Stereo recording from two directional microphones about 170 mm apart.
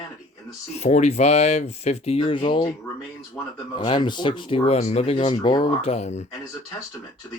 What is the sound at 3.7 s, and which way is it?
Speech, 30° left (ahead or behind).